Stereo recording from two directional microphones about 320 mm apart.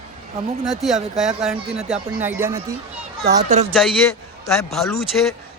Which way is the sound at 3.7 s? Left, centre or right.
Centre.